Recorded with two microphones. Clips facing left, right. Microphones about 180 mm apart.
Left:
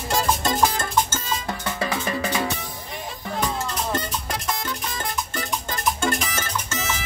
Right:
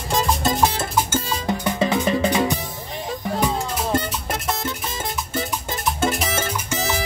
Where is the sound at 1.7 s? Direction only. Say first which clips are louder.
Right 6 dB; 20° right (ahead or behind).